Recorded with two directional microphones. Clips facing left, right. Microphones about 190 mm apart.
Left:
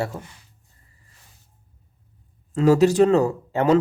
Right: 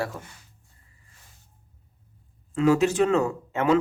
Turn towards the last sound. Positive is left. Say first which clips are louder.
# left 4 dB
turn(degrees=35)  # may be behind; listen again after turning